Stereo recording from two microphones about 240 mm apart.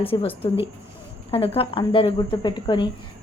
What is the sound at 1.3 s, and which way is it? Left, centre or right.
A woman's voice, left.